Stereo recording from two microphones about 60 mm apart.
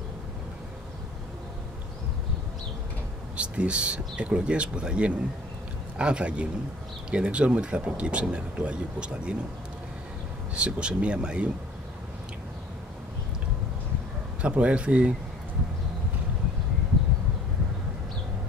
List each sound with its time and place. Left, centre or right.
3.3 s speech: centre
10.5 s speech: centre
14.4 s speech: right